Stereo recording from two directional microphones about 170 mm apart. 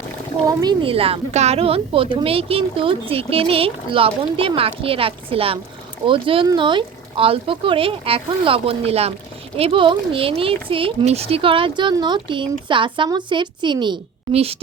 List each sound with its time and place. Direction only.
0.4 s a woman's voice: 25° right (ahead or behind)